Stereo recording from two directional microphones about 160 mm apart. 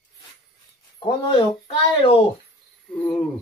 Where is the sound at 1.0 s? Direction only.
30° left (ahead or behind).